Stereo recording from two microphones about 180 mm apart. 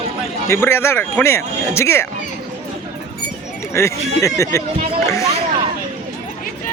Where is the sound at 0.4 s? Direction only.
15° left (ahead or behind).